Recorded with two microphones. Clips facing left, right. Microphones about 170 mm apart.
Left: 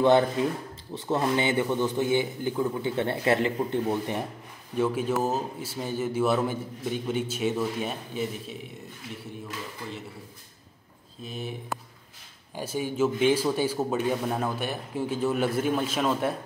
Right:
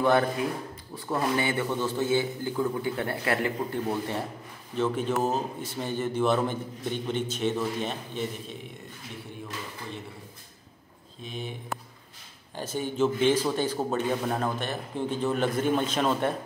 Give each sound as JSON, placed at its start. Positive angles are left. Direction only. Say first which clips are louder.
{"t": 0.9, "sound": "a man's voice", "louder": "left 2 dB", "side_deg": 20}
{"t": 4.7, "sound": "a man's voice", "louder": "left 1 dB", "side_deg": 10}
{"t": 11.2, "sound": "a man's voice", "louder": "left 1 dB", "side_deg": 5}
{"t": 12.5, "sound": "a man's voice", "louder": "left 1 dB", "side_deg": 10}